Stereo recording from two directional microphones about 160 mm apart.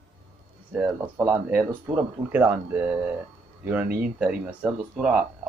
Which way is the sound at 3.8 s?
70° right (ahead or behind).